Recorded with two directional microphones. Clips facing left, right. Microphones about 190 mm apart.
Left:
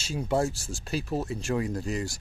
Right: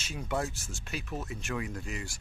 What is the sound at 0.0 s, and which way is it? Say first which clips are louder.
Speech: left 7 dB; 30° left (ahead or behind).